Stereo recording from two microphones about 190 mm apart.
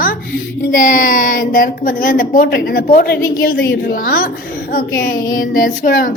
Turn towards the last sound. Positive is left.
turn(degrees=45)  # may be behind; listen again after turning